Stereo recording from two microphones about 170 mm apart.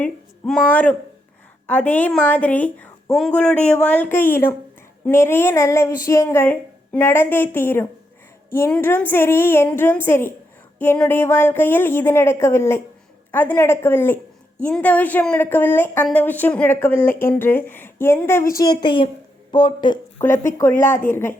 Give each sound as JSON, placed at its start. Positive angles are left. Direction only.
{"t": 0.0, "sound": "a woman's voice", "side_deg": 5}
{"t": 20.2, "sound": "a woman's voice", "side_deg": 15}